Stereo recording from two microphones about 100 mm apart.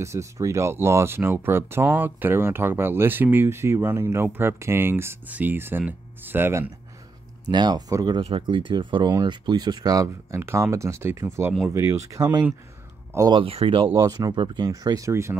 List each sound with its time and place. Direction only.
0.0 s speech: 30° right (ahead or behind)
7.4 s speech: 45° right (ahead or behind)
8.4 s speech: 55° right (ahead or behind); by 10.0 s 40° right (ahead or behind)
10.3 s speech: 25° right (ahead or behind)
13.3 s speech: 65° right (ahead or behind)
13.9 s speech: 35° right (ahead or behind)
14.7 s speech: 35° right (ahead or behind)